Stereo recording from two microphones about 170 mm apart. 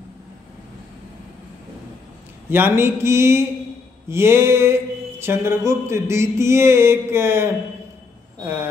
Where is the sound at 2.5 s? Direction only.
15° right (ahead or behind).